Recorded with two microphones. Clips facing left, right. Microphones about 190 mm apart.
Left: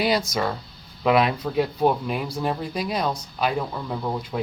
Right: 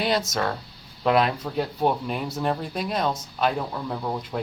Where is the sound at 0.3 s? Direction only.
20° right (ahead or behind).